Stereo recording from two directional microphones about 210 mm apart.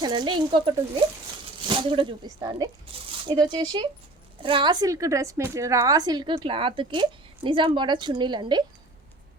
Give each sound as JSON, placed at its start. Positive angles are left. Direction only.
{"t": 0.0, "sound": "a woman's voice", "side_deg": -20}